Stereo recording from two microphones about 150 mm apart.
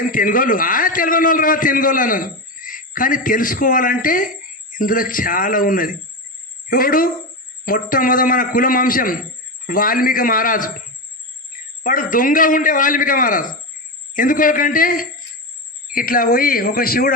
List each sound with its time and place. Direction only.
0.1 s a man's voice: 65° left (ahead or behind)
11.8 s a man's voice: 65° left (ahead or behind)